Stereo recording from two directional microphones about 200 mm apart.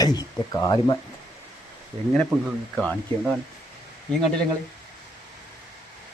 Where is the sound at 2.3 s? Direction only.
10° right (ahead or behind).